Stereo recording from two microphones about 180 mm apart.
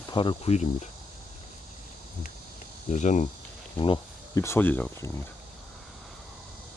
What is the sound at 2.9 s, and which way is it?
Speech, 40° left (ahead or behind).